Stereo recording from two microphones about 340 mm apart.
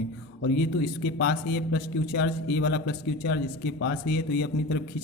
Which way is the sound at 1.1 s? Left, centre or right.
Left.